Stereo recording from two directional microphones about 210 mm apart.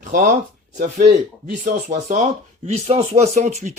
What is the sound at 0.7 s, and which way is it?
Speech, 35° right (ahead or behind).